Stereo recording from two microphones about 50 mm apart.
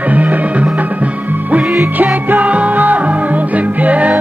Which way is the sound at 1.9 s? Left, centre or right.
Right.